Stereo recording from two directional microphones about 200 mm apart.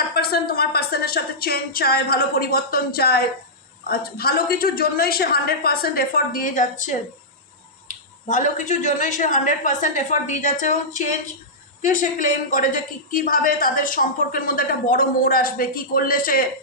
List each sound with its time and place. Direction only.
0.1 s a woman's voice: 50° left (ahead or behind)